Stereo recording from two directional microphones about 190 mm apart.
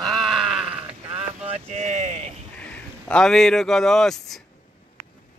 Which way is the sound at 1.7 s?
40° right (ahead or behind).